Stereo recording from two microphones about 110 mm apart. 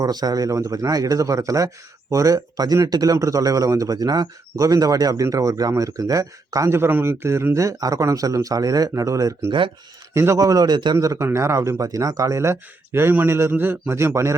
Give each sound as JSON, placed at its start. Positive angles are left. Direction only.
{"t": 0.0, "sound": "speech", "side_deg": -35}
{"t": 9.5, "sound": "speech", "side_deg": -50}
{"t": 10.2, "sound": "speech", "side_deg": -30}
{"t": 10.9, "sound": "speech", "side_deg": -25}